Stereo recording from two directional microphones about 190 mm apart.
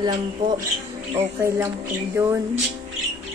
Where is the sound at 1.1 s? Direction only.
15° right (ahead or behind).